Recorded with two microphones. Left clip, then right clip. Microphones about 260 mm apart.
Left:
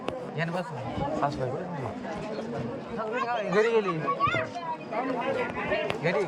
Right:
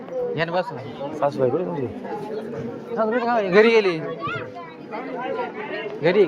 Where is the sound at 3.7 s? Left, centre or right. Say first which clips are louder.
Right 8 dB; right.